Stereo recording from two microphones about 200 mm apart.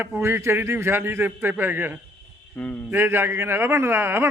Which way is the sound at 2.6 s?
5° left (ahead or behind).